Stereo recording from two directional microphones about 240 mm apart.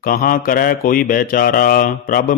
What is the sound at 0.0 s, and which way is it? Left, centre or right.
Mantra, left.